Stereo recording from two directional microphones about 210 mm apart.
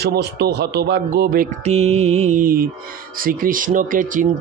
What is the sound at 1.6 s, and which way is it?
Mantra, 30° right (ahead or behind).